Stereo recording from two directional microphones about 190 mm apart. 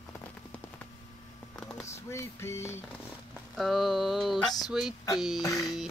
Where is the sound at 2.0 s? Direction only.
15° left (ahead or behind).